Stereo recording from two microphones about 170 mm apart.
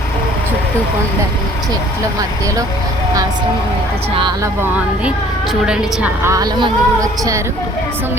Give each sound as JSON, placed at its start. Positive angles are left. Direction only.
{"t": 4.1, "sound": "speech", "side_deg": -30}
{"t": 4.6, "sound": "a woman's voice", "side_deg": -10}
{"t": 6.3, "sound": "speech", "side_deg": -20}